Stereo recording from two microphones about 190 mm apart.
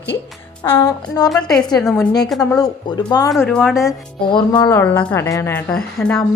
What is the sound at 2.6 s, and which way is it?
Music, 20° left (ahead or behind).